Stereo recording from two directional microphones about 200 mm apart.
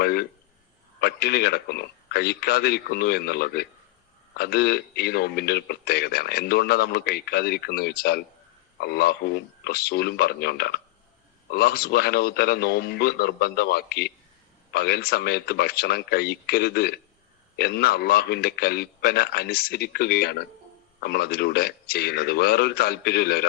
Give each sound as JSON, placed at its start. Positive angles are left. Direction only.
{"t": 0.0, "sound": "a man's voice", "side_deg": 50}